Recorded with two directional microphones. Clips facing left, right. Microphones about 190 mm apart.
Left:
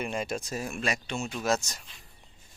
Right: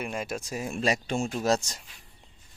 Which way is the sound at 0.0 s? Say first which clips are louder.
Left 1 dB; 5° right (ahead or behind).